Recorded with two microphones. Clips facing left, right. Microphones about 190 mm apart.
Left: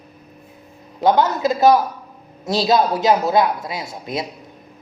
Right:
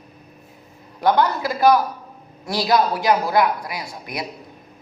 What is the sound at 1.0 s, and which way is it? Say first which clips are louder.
Speech: left 2 dB; 20° left (ahead or behind).